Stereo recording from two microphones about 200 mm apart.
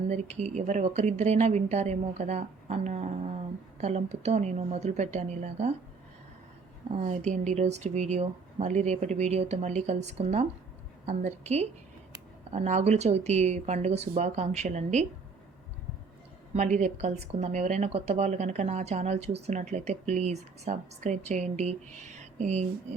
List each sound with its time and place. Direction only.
0.1 s speech: 35° right (ahead or behind)
6.9 s speech: 35° right (ahead or behind)
16.6 s speech: 35° right (ahead or behind)